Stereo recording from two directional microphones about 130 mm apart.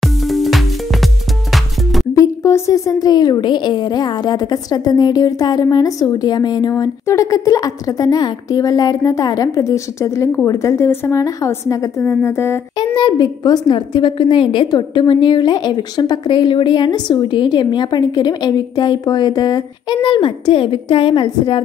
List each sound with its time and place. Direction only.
0.0 s music: centre (ahead or behind)
2.1 s a woman's voice: 20° left (ahead or behind)
12.7 s a woman's voice: 35° left (ahead or behind)